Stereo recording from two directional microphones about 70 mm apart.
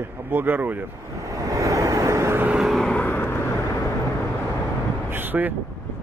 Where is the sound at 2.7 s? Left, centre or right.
Centre.